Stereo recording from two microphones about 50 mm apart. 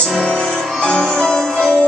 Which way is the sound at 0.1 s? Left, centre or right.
Centre.